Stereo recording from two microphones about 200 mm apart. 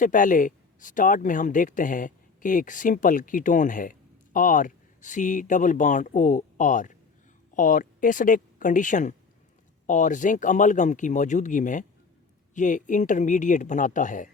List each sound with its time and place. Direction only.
0.0 s speech: 40° left (ahead or behind)